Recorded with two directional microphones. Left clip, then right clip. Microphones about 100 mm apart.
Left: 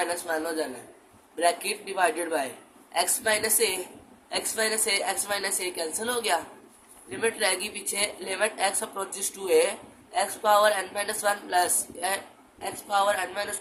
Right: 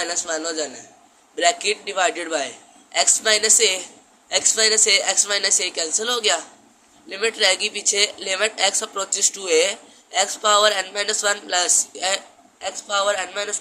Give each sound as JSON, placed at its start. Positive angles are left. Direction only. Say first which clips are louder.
{"t": 0.0, "sound": "speech", "louder": "right 3 dB", "side_deg": -45}
{"t": 10.1, "sound": "speech", "louder": "right 4 dB", "side_deg": -50}